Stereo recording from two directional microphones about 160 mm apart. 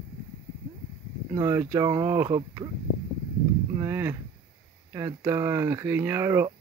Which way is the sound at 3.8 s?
15° right (ahead or behind).